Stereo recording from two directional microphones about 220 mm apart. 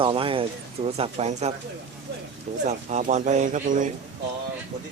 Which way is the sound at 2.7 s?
30° right (ahead or behind).